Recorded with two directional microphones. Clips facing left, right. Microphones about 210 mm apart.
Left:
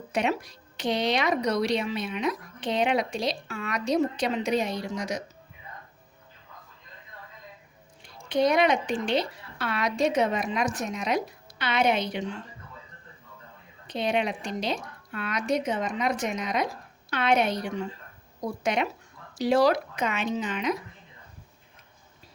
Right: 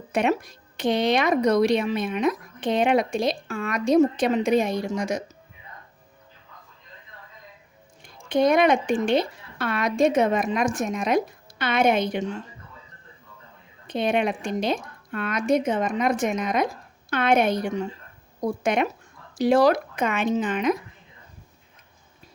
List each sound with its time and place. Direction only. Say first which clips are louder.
0.1 s speech: right 4 dB; 50° right (ahead or behind)
8.0 s speech: right 3 dB; 50° right (ahead or behind)
13.8 s speech: right 4 dB; 50° right (ahead or behind)